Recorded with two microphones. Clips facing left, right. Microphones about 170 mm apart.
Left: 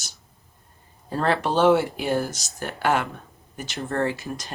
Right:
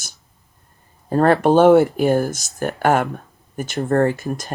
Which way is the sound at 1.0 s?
50° right (ahead or behind).